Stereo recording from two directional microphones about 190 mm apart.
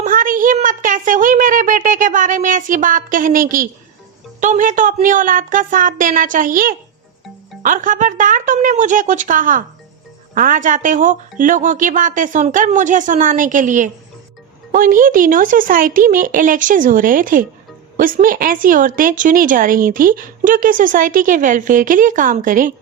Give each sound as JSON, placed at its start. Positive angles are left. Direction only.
{"t": 0.0, "sound": "speech", "side_deg": -45}